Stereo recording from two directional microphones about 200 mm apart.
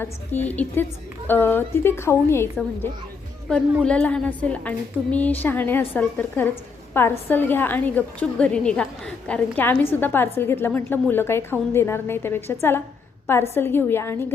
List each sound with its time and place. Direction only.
0.0 s a woman's voice: 10° left (ahead or behind)